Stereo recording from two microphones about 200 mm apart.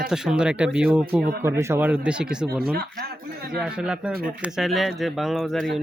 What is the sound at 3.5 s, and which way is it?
Speech, 5° right (ahead or behind).